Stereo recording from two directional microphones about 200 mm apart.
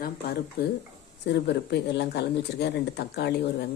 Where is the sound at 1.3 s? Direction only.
55° left (ahead or behind).